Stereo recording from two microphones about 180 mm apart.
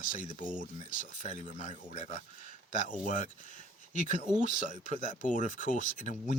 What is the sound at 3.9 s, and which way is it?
Speech, 45° right (ahead or behind).